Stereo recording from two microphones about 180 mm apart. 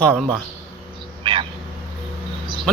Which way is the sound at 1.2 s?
25° right (ahead or behind).